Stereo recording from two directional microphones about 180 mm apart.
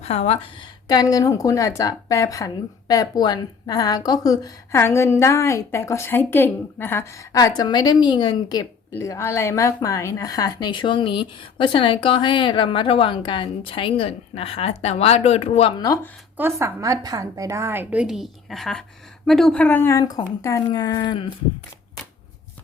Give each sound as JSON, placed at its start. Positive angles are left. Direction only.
{"t": 0.0, "sound": "a woman's voice", "side_deg": 35}
{"t": 0.9, "sound": "speech", "side_deg": 20}
{"t": 16.4, "sound": "a woman's voice", "side_deg": -15}